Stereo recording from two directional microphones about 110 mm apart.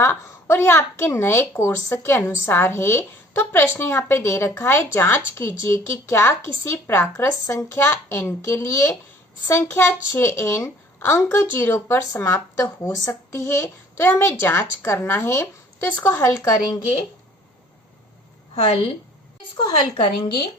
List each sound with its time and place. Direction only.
0.0 s a woman's voice: 20° left (ahead or behind)
19.5 s a woman's voice: 45° left (ahead or behind)